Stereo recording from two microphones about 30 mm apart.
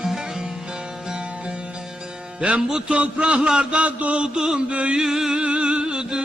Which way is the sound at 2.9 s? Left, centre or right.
Right.